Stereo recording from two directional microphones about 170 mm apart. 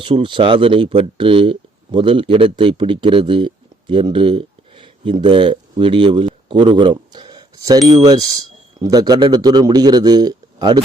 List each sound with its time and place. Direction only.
0.0 s speech: 30° right (ahead or behind)